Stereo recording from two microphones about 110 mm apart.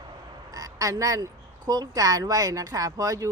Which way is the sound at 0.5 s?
30° right (ahead or behind).